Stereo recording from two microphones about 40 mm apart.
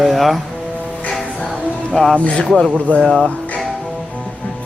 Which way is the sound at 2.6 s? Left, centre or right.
Left.